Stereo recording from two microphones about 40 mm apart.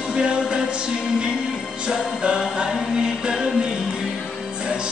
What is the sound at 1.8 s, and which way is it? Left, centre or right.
Music, right.